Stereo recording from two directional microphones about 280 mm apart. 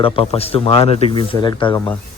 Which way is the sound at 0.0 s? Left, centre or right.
Left.